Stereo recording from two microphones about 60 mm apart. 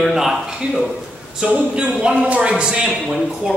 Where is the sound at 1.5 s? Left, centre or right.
Centre.